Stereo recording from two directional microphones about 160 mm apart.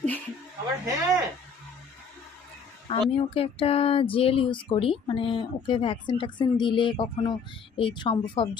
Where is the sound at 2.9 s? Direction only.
35° left (ahead or behind).